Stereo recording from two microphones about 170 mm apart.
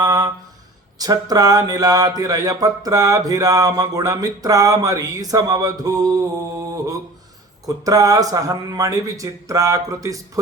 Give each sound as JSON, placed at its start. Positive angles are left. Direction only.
{"t": 0.0, "sound": "a sound", "side_deg": -20}
{"t": 0.9, "sound": "speech", "side_deg": -20}
{"t": 7.6, "sound": "speech", "side_deg": -20}